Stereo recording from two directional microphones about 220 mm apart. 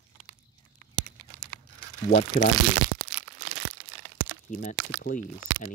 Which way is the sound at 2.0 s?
35° left (ahead or behind).